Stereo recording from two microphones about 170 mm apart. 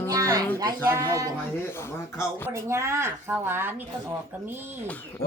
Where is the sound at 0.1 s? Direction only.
20° right (ahead or behind).